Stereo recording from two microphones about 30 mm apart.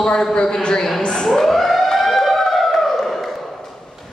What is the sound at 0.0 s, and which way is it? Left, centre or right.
Speech, left.